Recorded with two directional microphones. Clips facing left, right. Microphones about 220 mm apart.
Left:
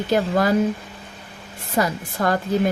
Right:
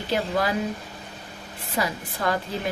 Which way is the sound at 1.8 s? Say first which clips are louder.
Left 6 dB; 45° left (ahead or behind).